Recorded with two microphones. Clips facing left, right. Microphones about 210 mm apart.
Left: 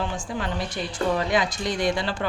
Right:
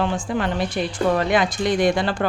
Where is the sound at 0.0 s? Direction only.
65° right (ahead or behind).